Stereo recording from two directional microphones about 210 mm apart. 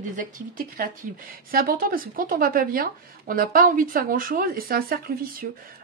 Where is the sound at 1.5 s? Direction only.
45° right (ahead or behind).